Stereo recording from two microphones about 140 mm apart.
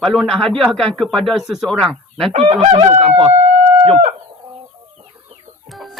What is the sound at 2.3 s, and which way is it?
Fowl, 40° right (ahead or behind).